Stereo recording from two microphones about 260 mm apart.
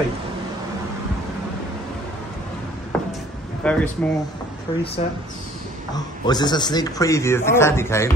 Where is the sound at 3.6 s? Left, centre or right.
Centre.